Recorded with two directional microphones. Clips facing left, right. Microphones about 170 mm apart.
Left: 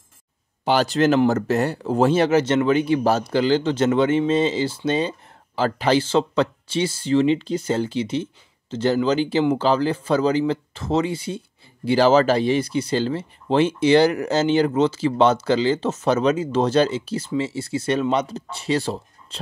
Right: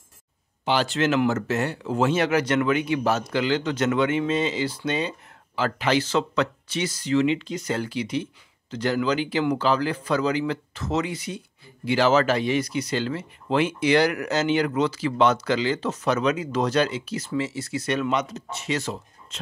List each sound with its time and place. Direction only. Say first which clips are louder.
0.7 s speech: left 5 dB; 40° left (ahead or behind)